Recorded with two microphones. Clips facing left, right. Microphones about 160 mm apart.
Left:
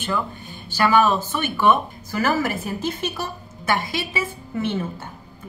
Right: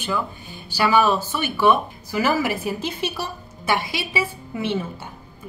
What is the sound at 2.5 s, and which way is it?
A woman's voice, 50° left (ahead or behind).